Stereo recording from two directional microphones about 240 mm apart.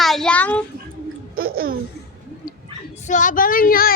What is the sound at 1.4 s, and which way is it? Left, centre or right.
Laughter, right.